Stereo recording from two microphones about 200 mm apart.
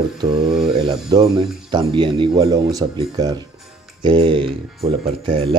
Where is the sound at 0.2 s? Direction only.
25° right (ahead or behind).